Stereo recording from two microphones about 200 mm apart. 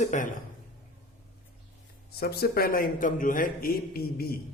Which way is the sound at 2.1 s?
50° left (ahead or behind).